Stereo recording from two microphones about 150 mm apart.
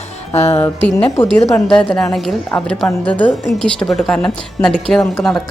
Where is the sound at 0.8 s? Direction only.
5° left (ahead or behind).